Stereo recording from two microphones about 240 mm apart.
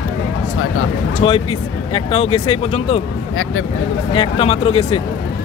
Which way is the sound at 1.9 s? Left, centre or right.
Left.